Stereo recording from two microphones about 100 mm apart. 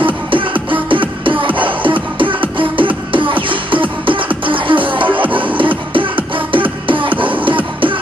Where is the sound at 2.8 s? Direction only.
55° right (ahead or behind).